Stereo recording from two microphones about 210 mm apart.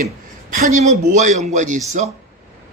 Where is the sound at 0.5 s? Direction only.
35° right (ahead or behind).